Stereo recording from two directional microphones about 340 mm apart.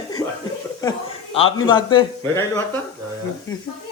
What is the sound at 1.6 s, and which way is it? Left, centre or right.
Speech, centre.